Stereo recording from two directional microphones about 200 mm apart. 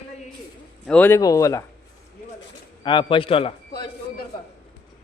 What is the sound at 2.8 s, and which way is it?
Speech, 25° left (ahead or behind).